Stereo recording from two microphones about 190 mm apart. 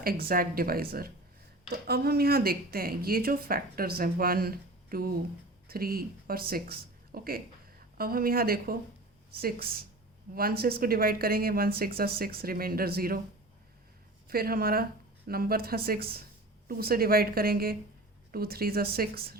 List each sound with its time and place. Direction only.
0.0 s speech: 50° right (ahead or behind)
14.3 s speech: 50° right (ahead or behind)